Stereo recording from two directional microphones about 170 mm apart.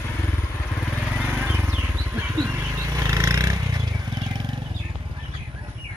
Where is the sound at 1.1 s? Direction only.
10° right (ahead or behind); by 4.7 s 25° right (ahead or behind).